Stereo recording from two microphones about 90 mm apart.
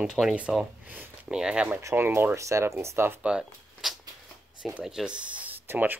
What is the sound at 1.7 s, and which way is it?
Speech, 25° right (ahead or behind).